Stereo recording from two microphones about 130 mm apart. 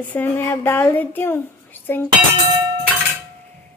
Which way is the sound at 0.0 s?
15° left (ahead or behind).